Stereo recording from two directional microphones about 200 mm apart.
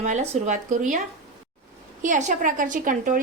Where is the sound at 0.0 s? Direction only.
35° right (ahead or behind).